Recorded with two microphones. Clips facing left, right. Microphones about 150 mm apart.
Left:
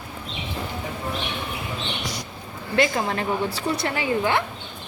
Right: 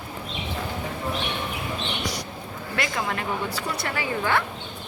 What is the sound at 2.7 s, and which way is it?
A woman's voice, 30° left (ahead or behind).